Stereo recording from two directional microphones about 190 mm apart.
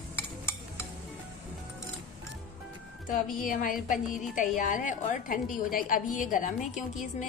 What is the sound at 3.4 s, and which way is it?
A woman's voice, 45° left (ahead or behind).